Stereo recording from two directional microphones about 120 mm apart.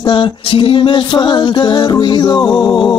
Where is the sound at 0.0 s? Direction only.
40° left (ahead or behind).